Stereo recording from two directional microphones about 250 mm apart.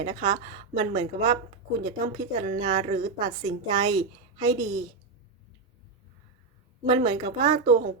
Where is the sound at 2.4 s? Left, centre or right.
Right.